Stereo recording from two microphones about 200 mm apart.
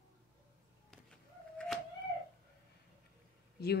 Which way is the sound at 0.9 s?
5° left (ahead or behind).